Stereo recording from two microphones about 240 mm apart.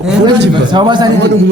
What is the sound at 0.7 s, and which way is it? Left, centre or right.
Speech, centre.